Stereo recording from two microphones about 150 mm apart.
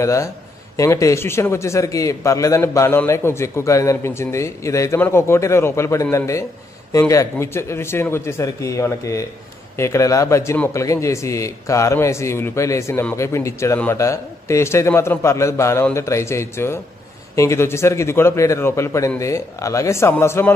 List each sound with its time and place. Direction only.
0.0 s a man's voice: 20° left (ahead or behind)